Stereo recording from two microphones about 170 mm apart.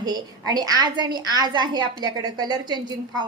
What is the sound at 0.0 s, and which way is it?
A woman's voice, 25° right (ahead or behind).